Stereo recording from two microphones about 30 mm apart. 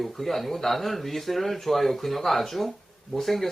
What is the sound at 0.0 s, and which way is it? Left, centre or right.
Speech, centre.